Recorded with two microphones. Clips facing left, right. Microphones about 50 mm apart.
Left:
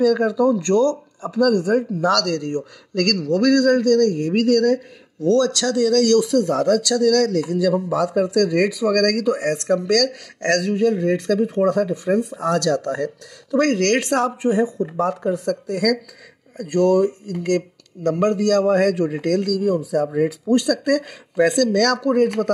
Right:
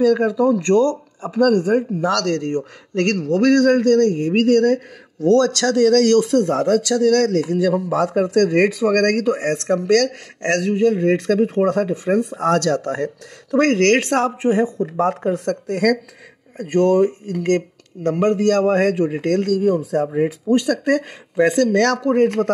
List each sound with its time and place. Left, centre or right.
0.0 s speech: right
1.7 s speech: centre
2.2 s a man's voice: right
6.6 s a man's voice: right
10.4 s speech: centre
11.1 s a man's voice: right
14.1 s a man's voice: right
15.3 s a man's voice: right
17.3 s a man's voice: right; by 19.2 s centre
19.2 s a man's voice: right
20.2 s speech: right